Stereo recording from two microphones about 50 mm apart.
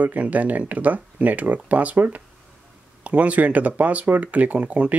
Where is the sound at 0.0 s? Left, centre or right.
Right.